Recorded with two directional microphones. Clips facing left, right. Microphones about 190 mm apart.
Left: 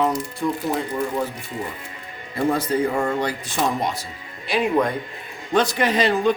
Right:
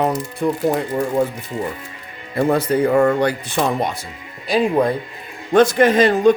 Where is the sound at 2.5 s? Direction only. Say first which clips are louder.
Right 6 dB; 65° right (ahead or behind).